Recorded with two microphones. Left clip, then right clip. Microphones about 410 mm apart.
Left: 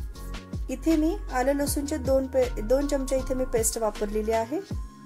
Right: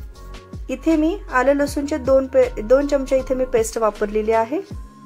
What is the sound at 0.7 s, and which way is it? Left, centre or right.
Speech, left.